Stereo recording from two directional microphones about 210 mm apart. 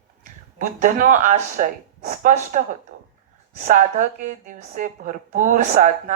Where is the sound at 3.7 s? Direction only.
35° right (ahead or behind).